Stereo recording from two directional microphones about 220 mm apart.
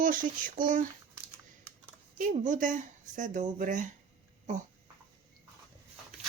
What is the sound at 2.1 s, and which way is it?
Speech, 35° right (ahead or behind).